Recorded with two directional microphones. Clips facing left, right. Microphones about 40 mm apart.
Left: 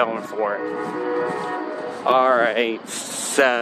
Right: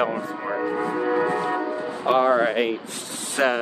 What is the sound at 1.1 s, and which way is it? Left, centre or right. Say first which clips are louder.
Music: right 1 dB; right.